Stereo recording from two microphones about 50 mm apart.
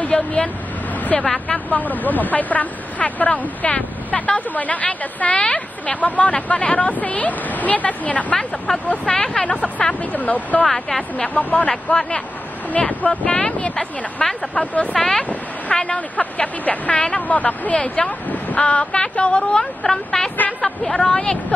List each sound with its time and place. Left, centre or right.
0.0 s vehicle: left
1.1 s speech: centre
1.5 s speech: left
9.0 s speech: centre; by 10.7 s left
10.7 s speech: centre
11.1 s speech: left
11.7 s speech: centre
12.7 s speech: left
15.0 s speech: centre
15.7 s speech: left
18.0 s speech: centre
21.1 s speech: centre